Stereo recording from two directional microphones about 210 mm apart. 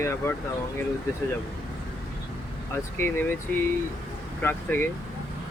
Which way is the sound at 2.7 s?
10° left (ahead or behind).